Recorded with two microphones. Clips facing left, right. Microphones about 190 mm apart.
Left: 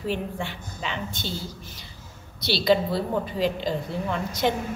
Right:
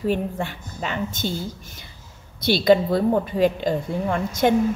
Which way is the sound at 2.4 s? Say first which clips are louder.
Right 5 dB; 50° right (ahead or behind).